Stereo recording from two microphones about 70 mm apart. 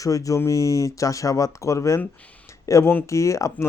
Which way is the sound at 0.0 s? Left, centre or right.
Left.